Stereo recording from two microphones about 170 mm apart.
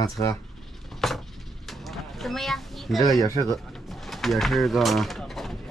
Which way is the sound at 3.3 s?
20° left (ahead or behind).